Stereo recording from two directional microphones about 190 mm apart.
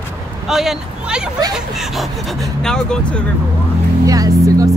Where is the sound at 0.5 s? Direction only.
Centre (ahead or behind).